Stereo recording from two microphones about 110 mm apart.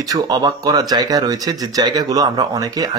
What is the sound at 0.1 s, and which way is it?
A man's voice, 35° right (ahead or behind).